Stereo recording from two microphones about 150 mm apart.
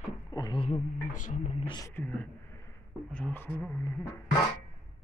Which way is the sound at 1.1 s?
55° left (ahead or behind).